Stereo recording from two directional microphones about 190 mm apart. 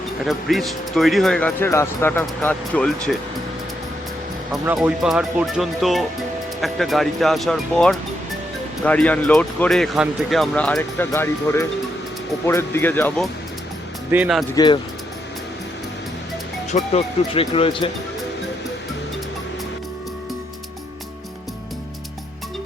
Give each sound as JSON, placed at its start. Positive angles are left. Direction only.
{"t": 0.3, "sound": "speech", "side_deg": 0}
{"t": 4.6, "sound": "speech", "side_deg": -5}
{"t": 14.1, "sound": "speech", "side_deg": -5}
{"t": 14.5, "sound": "speech", "side_deg": 25}
{"t": 16.7, "sound": "speech", "side_deg": 30}